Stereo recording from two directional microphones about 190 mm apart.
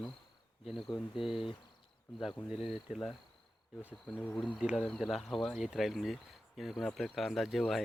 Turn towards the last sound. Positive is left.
turn(degrees=0)  # may be behind; listen again after turning